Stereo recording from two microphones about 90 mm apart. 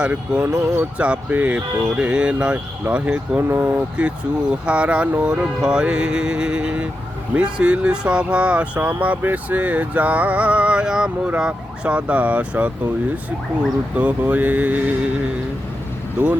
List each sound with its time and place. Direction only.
0.0 s speech: 15° right (ahead or behind)
0.4 s speech: 25° right (ahead or behind)
4.0 s speech: 10° right (ahead or behind)
13.9 s speech: 15° right (ahead or behind)